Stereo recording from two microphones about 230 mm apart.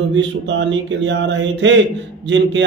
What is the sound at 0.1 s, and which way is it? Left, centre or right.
A man's voice, right.